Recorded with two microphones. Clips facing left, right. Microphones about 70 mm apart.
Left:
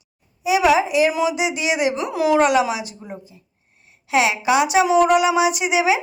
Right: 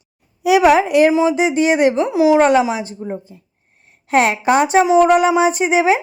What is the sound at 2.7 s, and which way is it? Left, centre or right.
Speech, right.